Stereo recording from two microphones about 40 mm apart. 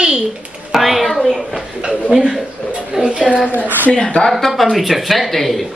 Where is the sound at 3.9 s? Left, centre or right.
Left.